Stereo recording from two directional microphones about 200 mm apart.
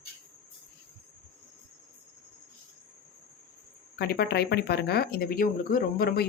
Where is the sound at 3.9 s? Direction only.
50° left (ahead or behind).